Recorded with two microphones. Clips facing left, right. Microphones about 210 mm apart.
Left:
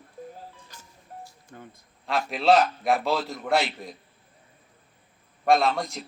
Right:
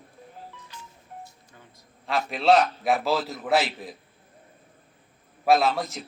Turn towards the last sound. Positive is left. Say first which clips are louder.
# right 1 dB
turn(degrees=0)  # may be behind; listen again after turning